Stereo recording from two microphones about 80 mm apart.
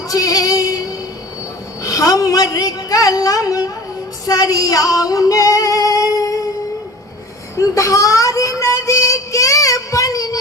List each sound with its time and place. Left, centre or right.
0.1 s female singing: left
1.8 s a sound: left
4.3 s female singing: left
7.5 s music: left